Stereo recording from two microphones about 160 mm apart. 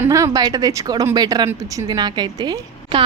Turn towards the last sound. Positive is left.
turn(degrees=-30)  # may be behind; listen again after turning